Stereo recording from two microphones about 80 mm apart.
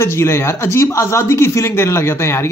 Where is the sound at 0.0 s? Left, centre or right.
Left.